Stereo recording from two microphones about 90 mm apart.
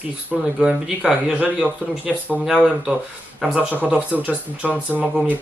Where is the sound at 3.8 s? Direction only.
15° right (ahead or behind).